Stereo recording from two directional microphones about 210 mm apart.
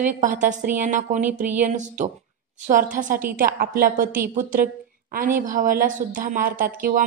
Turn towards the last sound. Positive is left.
turn(degrees=-40)  # may be behind; listen again after turning